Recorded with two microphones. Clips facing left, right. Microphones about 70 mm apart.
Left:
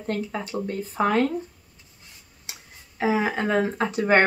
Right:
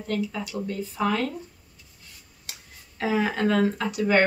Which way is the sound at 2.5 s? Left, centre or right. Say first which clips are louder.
Left 1 dB; left.